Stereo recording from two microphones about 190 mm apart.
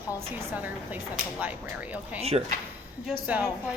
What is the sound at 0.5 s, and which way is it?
A woman's voice, 10° right (ahead or behind).